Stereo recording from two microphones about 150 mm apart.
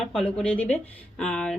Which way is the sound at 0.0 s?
Centre (ahead or behind).